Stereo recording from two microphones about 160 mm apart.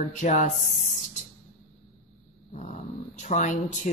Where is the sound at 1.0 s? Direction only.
50° left (ahead or behind).